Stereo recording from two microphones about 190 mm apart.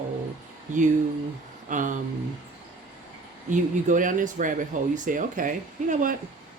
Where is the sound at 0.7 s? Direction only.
40° right (ahead or behind).